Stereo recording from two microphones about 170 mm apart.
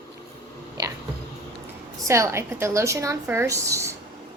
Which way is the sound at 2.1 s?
15° right (ahead or behind).